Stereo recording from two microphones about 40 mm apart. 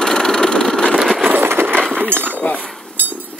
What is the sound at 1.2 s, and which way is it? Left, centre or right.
Coin, right.